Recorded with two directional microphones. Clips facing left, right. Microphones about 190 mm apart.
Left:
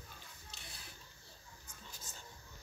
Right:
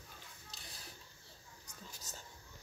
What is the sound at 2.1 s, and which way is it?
Whispering, 40° right (ahead or behind).